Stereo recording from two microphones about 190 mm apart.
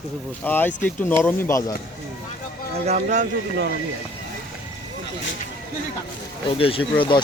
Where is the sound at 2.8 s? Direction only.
40° right (ahead or behind).